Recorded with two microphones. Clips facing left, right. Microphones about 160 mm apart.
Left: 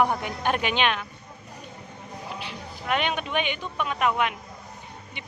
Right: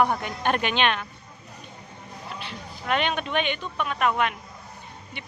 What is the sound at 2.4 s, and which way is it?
A woman's voice, 10° left (ahead or behind).